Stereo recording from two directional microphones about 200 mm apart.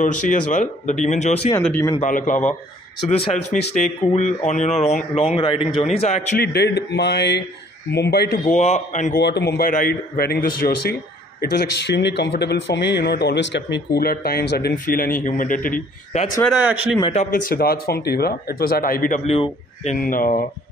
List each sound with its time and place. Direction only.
0.0 s speech: 40° left (ahead or behind)
1.6 s speech: 10° left (ahead or behind)
2.0 s speech: 40° left (ahead or behind)
6.4 s a man's voice: 55° left (ahead or behind)
8.5 s speech: 35° left (ahead or behind)
9.2 s a man's voice: 55° left (ahead or behind); by 16.3 s 40° left (ahead or behind)
16.4 s speech: 5° right (ahead or behind)
17.0 s speech: 30° left (ahead or behind)
17.5 s speech: 50° left (ahead or behind)